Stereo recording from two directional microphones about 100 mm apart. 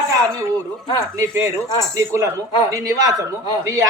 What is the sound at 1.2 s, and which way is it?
Speech, 30° right (ahead or behind).